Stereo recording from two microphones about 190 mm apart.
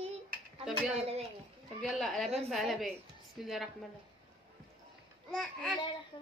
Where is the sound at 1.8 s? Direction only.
Centre (ahead or behind).